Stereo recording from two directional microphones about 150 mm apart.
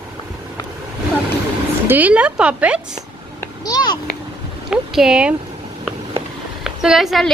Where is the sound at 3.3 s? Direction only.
25° left (ahead or behind).